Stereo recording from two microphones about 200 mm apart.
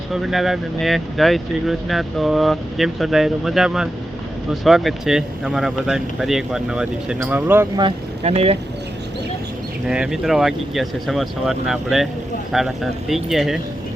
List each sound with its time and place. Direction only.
0.1 s speech: centre (ahead or behind)
7.8 s speech: 30° right (ahead or behind)
9.8 s speech: 5° right (ahead or behind)